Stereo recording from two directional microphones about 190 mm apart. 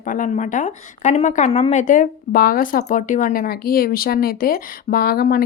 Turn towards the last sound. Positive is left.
turn(degrees=50)  # may be behind; listen again after turning